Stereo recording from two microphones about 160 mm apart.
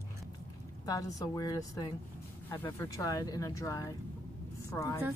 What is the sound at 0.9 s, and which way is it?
A woman's voice, 20° left (ahead or behind).